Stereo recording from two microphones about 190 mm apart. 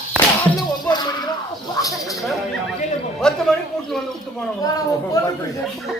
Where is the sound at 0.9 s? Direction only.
20° left (ahead or behind).